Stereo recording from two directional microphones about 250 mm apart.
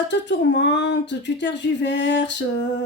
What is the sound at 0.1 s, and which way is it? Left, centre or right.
Speech, left.